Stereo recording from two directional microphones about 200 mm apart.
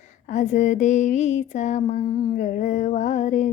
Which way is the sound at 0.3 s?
40° left (ahead or behind).